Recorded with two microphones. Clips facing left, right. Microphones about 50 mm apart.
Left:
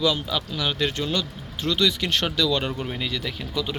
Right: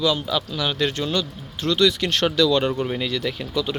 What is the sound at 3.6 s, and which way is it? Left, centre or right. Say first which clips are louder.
Speech: right 3 dB; centre.